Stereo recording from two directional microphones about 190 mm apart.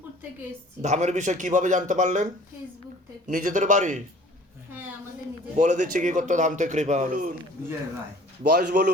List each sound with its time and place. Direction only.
0.8 s a man's voice: 40° right (ahead or behind)
5.5 s a man's voice: 40° right (ahead or behind)
8.4 s speech: 60° right (ahead or behind)